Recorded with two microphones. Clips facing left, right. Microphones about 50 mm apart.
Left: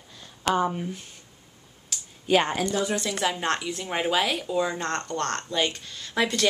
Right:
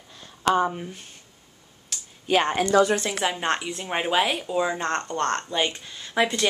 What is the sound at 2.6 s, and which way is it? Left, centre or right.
Speech, right.